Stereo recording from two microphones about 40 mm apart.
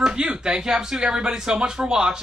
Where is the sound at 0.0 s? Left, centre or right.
Centre.